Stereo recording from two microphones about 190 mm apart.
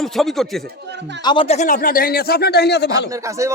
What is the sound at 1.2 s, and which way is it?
Speech, 25° left (ahead or behind).